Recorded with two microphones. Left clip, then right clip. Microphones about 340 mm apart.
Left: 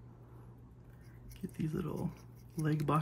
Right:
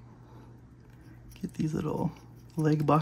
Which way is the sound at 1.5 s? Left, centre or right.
Centre.